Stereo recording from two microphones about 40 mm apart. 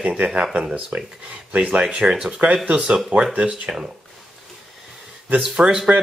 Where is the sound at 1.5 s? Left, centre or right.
Right.